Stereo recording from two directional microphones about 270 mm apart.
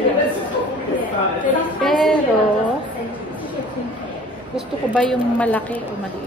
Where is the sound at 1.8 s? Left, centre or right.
Centre.